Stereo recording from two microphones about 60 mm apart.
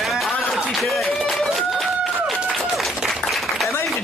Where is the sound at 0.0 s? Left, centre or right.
Centre.